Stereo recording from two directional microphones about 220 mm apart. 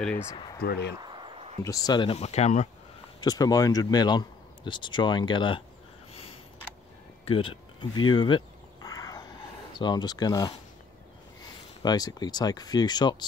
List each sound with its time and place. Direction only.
0.1 s speech: 30° left (ahead or behind)
0.6 s speech: 50° left (ahead or behind)
1.0 s a sound: 25° right (ahead or behind)
1.6 s speech: 15° left (ahead or behind); by 2.7 s 30° left (ahead or behind)
3.2 s speech: 15° left (ahead or behind)
7.2 s speech: 25° left (ahead or behind)
8.1 s a sound: 20° left (ahead or behind)
9.8 s speech: 20° left (ahead or behind)
11.8 s speech: 20° left (ahead or behind)